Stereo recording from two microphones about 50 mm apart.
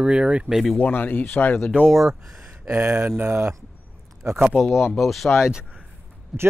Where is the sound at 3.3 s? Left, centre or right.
Right.